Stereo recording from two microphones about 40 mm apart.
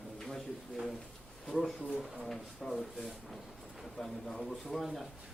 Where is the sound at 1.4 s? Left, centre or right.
Centre.